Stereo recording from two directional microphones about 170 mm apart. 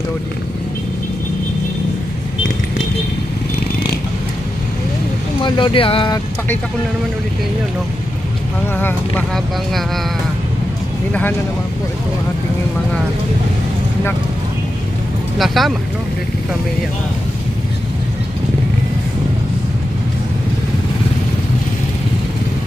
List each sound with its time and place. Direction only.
5.4 s speech: 30° left (ahead or behind)
8.7 s speech: 10° left (ahead or behind)
15.3 s speech: centre (ahead or behind)